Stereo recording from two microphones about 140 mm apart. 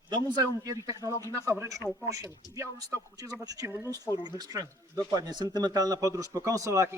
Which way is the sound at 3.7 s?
15° right (ahead or behind).